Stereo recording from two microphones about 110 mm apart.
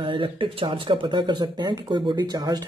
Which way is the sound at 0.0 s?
50° right (ahead or behind).